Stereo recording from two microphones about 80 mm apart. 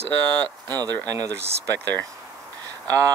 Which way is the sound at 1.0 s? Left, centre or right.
Right.